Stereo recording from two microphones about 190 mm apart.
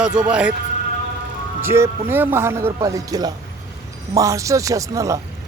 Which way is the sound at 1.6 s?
15° right (ahead or behind).